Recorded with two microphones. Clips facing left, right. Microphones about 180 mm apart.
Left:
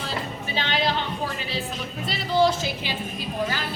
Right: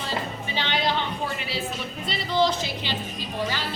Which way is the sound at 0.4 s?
5° left (ahead or behind).